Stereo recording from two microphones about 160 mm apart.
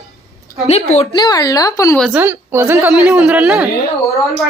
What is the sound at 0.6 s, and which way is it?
Speech, 40° left (ahead or behind).